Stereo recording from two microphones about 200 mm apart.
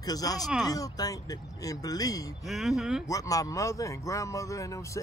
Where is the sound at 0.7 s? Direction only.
15° left (ahead or behind).